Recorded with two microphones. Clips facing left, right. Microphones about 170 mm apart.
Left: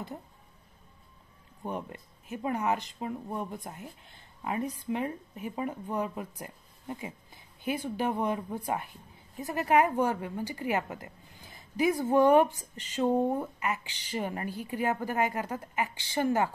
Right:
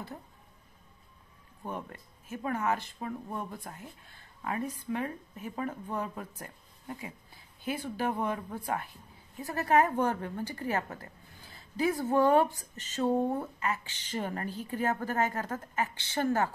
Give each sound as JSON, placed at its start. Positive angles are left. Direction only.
{"t": 1.6, "sound": "a woman's voice", "side_deg": 20}